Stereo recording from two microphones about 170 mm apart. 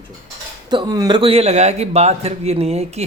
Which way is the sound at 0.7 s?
25° right (ahead or behind).